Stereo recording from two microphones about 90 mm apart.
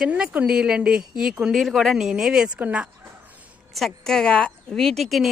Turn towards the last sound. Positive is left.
turn(degrees=0)  # may be behind; listen again after turning